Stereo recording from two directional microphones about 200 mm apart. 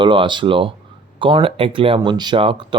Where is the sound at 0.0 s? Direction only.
25° right (ahead or behind).